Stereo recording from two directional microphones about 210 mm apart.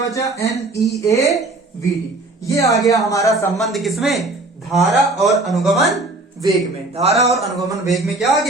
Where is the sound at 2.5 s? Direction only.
15° left (ahead or behind).